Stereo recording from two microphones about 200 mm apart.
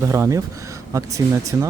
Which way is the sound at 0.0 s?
15° right (ahead or behind).